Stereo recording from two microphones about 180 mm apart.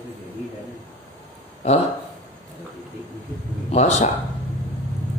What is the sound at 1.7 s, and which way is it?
Speech, 35° left (ahead or behind).